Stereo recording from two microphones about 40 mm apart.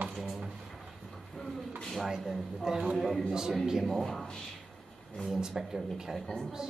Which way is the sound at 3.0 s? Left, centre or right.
Centre.